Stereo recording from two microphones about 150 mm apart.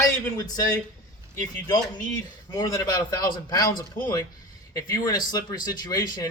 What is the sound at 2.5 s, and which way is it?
Speech, 25° left (ahead or behind).